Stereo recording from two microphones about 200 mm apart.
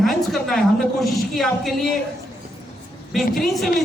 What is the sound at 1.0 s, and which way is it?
Speech, centre (ahead or behind).